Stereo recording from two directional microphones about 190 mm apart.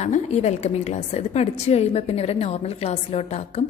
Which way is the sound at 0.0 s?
35° left (ahead or behind).